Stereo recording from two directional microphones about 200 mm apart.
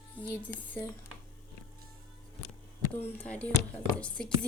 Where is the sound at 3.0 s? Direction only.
10° left (ahead or behind).